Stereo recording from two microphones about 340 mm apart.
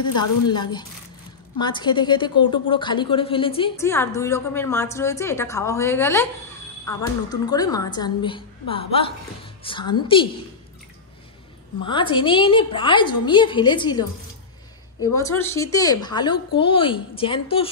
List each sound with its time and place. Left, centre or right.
0.5 s a woman's voice: centre
11.8 s a woman's voice: centre
15.1 s a woman's voice: centre